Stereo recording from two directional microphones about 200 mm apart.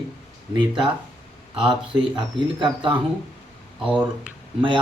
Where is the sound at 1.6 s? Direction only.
25° right (ahead or behind).